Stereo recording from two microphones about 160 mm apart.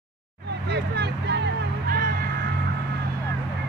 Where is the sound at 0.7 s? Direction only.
90° right.